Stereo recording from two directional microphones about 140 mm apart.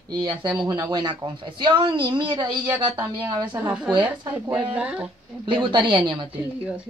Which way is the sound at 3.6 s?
10° right (ahead or behind).